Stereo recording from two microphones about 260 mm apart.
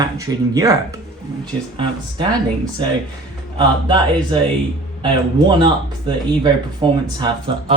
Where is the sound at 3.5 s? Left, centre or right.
Centre.